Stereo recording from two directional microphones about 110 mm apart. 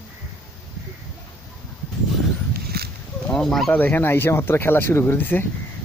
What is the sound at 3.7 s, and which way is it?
Speech, 15° left (ahead or behind).